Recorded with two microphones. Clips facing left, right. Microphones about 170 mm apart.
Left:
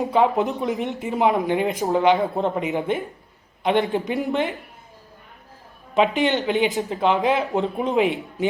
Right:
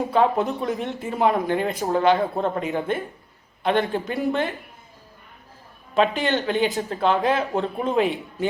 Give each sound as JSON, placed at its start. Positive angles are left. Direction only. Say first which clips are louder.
{"t": 0.0, "sound": "a man's voice", "louder": "left 1 dB", "side_deg": 15}
{"t": 5.9, "sound": "speech", "louder": "left 2 dB", "side_deg": 20}